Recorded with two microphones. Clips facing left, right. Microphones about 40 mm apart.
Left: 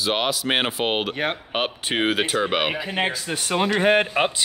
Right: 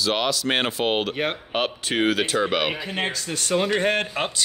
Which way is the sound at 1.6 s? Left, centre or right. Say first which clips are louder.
Right 1 dB; centre.